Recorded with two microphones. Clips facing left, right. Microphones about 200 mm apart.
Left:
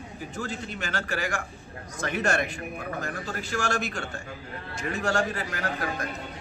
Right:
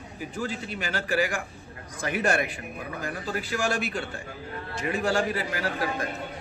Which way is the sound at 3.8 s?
45° left (ahead or behind).